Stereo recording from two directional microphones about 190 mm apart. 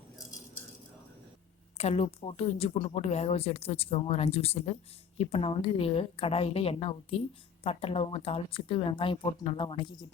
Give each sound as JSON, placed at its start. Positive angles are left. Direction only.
{"t": 1.8, "sound": "a woman's voice", "side_deg": 30}